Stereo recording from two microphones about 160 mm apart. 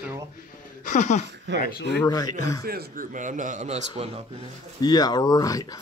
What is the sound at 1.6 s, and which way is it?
Speech, 70° left (ahead or behind).